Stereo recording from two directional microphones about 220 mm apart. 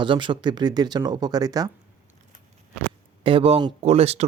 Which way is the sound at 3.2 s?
25° right (ahead or behind).